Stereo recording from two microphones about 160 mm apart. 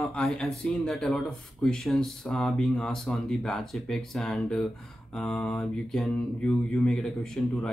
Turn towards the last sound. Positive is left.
turn(degrees=5)  # may be behind; listen again after turning